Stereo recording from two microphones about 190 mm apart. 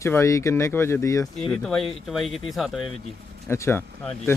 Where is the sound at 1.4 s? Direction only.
Centre (ahead or behind).